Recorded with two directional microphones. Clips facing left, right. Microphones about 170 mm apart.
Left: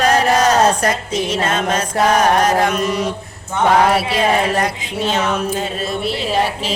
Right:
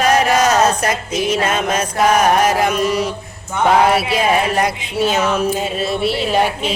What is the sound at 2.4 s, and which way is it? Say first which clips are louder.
Speech: even; centre (ahead or behind).